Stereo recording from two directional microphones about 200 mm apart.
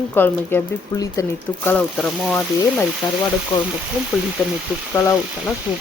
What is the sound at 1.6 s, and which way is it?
Speech, 5° left (ahead or behind).